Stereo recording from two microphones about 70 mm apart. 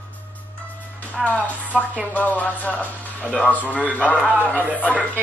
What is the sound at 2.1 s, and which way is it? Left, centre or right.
A woman's voice, left.